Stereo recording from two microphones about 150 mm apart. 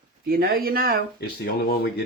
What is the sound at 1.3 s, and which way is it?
Speech, 90° left.